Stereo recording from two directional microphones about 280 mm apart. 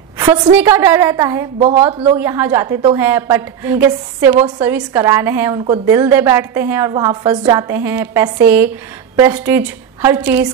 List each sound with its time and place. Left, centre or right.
0.2 s a sound: centre
0.6 s a woman's voice: centre
2.1 s a woman's voice: centre